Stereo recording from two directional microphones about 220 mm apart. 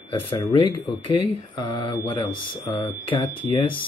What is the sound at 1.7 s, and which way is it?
Mantra, 20° left (ahead or behind).